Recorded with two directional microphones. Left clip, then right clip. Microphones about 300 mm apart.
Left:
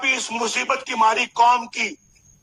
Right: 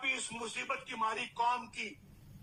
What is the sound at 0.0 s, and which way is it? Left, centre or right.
A man's voice, left.